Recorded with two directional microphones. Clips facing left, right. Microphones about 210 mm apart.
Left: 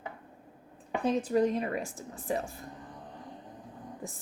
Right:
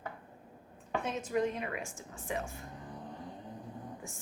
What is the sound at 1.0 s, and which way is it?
A woman's voice, 35° left (ahead or behind).